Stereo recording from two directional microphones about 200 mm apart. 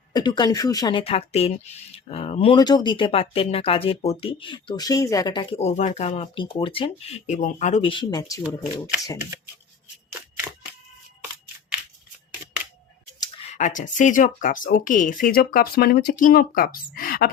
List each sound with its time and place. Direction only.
0.1 s speech: 20° left (ahead or behind)
13.5 s speech: 40° left (ahead or behind)